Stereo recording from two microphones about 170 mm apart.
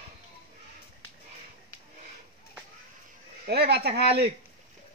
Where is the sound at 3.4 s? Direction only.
70° right (ahead or behind).